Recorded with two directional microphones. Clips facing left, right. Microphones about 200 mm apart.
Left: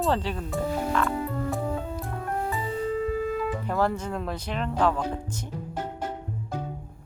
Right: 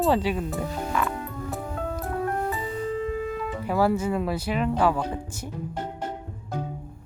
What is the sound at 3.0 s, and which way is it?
Speech, centre (ahead or behind).